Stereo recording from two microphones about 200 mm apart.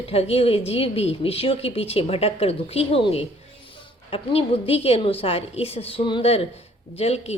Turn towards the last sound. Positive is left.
turn(degrees=30)  # may be behind; listen again after turning